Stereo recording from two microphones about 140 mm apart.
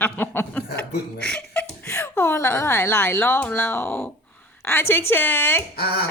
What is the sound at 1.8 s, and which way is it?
A woman's voice, 15° left (ahead or behind).